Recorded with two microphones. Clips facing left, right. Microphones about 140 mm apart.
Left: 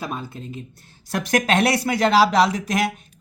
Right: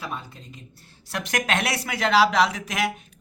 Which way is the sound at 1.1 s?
35° left (ahead or behind).